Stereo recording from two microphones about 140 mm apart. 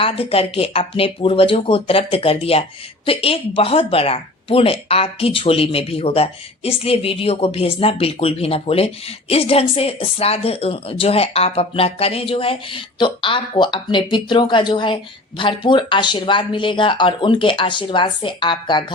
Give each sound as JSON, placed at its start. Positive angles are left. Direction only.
{"t": 0.0, "sound": "speech", "side_deg": 45}